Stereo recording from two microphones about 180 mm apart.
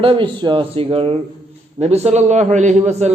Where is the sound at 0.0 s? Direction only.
30° right (ahead or behind).